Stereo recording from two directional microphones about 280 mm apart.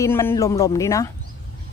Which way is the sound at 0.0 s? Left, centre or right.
Centre.